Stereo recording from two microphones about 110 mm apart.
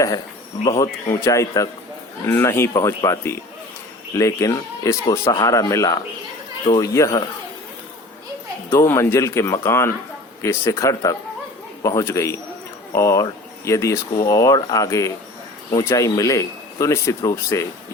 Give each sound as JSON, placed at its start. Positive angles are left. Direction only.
{"t": 0.6, "sound": "speech", "side_deg": 30}
{"t": 8.7, "sound": "speech", "side_deg": 25}